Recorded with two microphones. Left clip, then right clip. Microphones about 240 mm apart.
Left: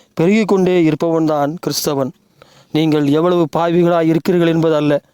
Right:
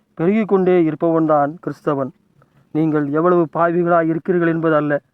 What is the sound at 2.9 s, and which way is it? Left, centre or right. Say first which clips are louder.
Speech: left 2 dB; left.